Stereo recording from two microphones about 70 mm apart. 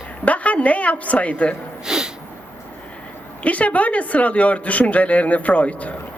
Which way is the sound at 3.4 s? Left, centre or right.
Left.